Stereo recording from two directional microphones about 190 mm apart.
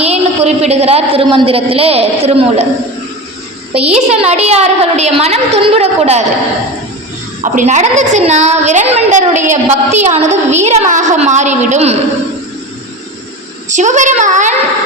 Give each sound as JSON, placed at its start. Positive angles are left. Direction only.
{"t": 0.0, "sound": "a woman's voice", "side_deg": -35}
{"t": 3.8, "sound": "a woman's voice", "side_deg": -35}
{"t": 7.4, "sound": "a woman's voice", "side_deg": -40}
{"t": 13.7, "sound": "a woman's voice", "side_deg": -40}